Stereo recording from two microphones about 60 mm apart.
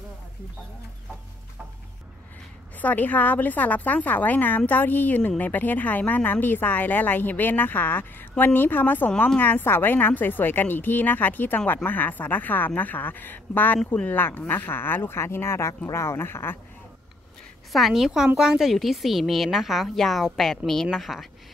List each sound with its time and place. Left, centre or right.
2.8 s a woman's voice: left
17.7 s a woman's voice: centre